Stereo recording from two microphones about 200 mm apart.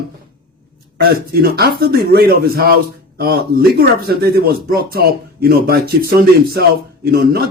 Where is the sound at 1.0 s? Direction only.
50° right (ahead or behind).